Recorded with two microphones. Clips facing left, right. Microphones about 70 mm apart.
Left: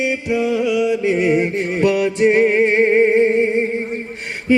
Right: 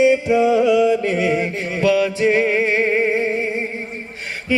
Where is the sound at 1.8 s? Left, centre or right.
Left.